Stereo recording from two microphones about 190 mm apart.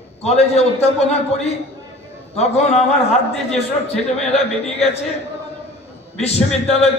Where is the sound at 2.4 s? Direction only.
35° left (ahead or behind).